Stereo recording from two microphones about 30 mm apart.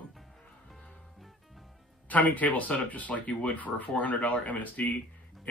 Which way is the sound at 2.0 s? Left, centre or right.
Left.